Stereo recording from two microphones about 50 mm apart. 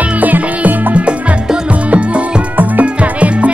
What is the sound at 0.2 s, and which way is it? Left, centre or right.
Music, right.